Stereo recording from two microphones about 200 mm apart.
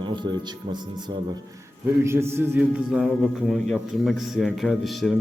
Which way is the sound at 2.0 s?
10° right (ahead or behind).